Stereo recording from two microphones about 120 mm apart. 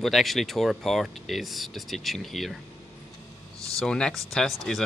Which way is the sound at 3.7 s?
5° left (ahead or behind).